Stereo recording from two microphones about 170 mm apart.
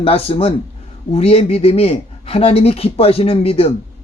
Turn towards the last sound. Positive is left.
turn(degrees=35)  # may be behind; listen again after turning